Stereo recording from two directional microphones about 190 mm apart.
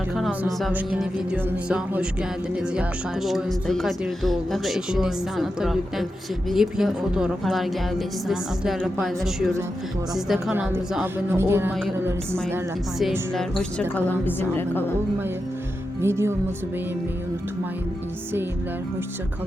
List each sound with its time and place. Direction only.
0.6 s a woman's voice: 5° right (ahead or behind)
13.0 s a woman's voice: centre (ahead or behind)
16.0 s a woman's voice: 15° right (ahead or behind)